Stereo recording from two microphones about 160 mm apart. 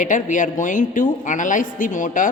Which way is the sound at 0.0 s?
55° left (ahead or behind).